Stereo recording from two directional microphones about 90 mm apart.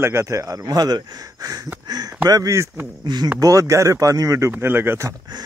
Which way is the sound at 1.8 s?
50° right (ahead or behind).